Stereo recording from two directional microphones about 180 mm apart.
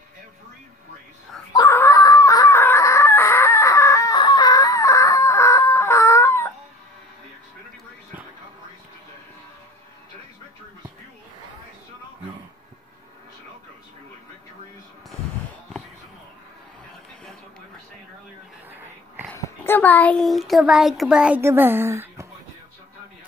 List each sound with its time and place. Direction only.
1.5 s chicken: 15° left (ahead or behind)
17.2 s television: 5° left (ahead or behind)
19.3 s a sound: 15° left (ahead or behind); by 22.3 s 15° right (ahead or behind)